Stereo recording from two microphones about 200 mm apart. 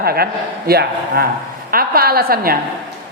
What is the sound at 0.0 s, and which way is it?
A woman's voice, 50° right (ahead or behind).